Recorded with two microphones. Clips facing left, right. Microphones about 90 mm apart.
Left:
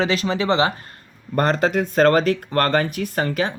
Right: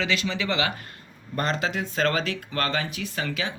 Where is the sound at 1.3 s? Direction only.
45° left (ahead or behind).